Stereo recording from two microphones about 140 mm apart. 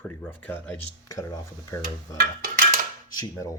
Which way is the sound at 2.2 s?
90° right.